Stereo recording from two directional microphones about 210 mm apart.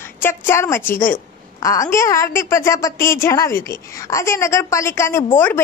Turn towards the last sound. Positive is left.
turn(degrees=10)  # may be behind; listen again after turning